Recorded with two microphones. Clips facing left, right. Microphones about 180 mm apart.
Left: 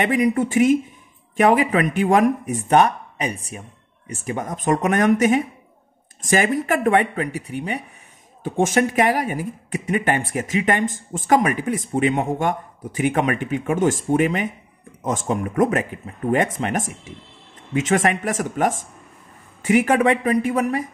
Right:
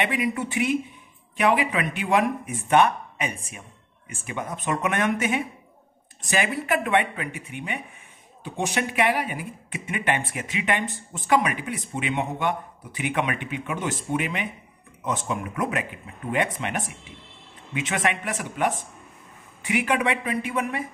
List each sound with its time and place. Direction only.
0.0 s a woman's voice: 45° left (ahead or behind)